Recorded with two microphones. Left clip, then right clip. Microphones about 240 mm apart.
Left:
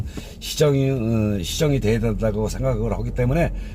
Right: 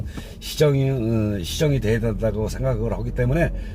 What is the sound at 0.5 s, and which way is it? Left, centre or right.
A man's voice, left.